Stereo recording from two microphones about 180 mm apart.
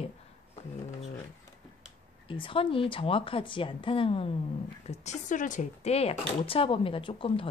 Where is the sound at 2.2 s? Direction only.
30° left (ahead or behind).